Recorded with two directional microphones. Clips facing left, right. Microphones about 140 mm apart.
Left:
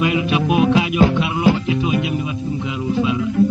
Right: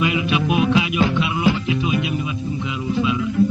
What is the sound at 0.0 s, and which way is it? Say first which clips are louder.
Music: left 2 dB; 40° left (ahead or behind).